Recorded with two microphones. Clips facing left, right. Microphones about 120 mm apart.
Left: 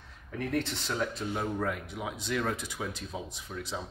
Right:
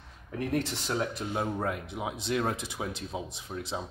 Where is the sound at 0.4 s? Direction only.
15° right (ahead or behind).